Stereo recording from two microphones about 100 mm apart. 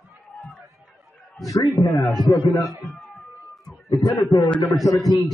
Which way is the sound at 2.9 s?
5° left (ahead or behind).